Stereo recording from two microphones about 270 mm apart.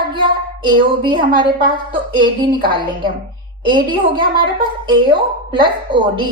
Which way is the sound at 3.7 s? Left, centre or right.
Centre.